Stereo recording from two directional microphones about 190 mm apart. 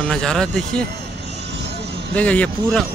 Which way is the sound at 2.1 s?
5° left (ahead or behind).